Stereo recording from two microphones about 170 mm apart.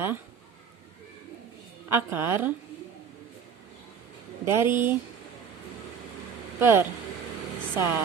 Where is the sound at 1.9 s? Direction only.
10° right (ahead or behind).